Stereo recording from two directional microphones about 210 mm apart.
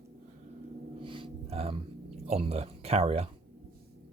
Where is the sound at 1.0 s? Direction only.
25° right (ahead or behind).